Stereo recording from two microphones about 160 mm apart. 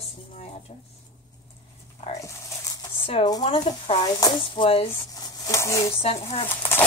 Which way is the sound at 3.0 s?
35° left (ahead or behind).